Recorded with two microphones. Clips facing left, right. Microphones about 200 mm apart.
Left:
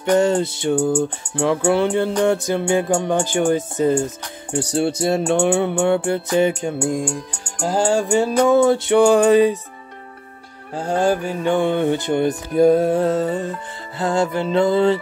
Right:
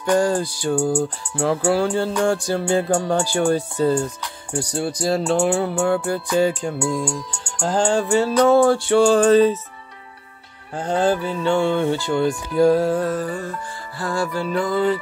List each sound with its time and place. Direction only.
0.0 s music: 20° left (ahead or behind)
7.6 s music: 10° left (ahead or behind)
10.8 s music: 10° left (ahead or behind); by 15.0 s 25° left (ahead or behind)